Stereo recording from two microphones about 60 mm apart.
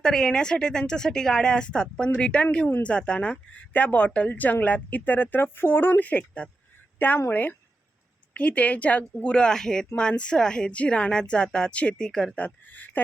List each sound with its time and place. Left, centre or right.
0.0 s speech: centre; by 6.1 s left
6.1 s speech: left
8.4 s speech: left
12.7 s speech: left